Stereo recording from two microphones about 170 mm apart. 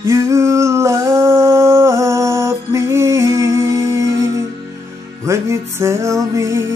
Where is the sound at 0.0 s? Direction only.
15° right (ahead or behind).